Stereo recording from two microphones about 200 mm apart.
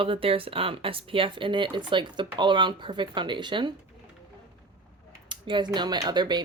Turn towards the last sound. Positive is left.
turn(degrees=-20)  # may be behind; listen again after turning